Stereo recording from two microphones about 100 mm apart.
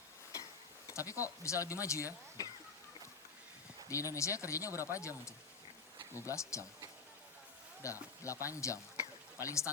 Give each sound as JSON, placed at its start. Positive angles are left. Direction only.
{"t": 0.9, "sound": "speech", "side_deg": 30}
{"t": 3.8, "sound": "speech", "side_deg": 30}
{"t": 7.8, "sound": "speech", "side_deg": 30}